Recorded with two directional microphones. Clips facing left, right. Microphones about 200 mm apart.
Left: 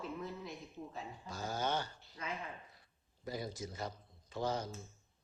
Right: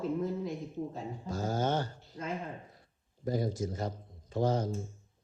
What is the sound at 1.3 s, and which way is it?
Speech, 45° right (ahead or behind).